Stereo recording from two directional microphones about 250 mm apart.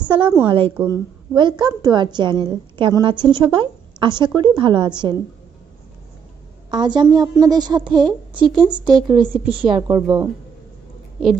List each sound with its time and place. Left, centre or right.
0.1 s a woman's voice: centre
6.7 s a woman's voice: centre
9.3 s a woman's voice: centre
9.7 s a woman's voice: centre